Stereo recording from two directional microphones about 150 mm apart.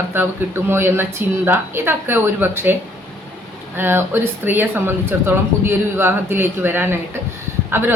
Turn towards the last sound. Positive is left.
turn(degrees=-15)  # may be behind; listen again after turning